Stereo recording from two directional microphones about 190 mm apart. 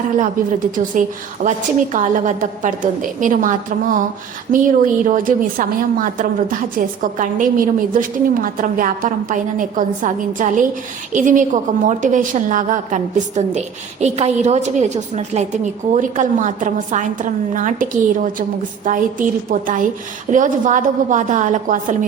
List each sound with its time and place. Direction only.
0.8 s a woman's voice: 40° right (ahead or behind)